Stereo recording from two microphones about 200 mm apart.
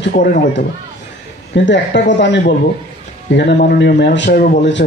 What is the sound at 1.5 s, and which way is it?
A man's voice, 65° left (ahead or behind).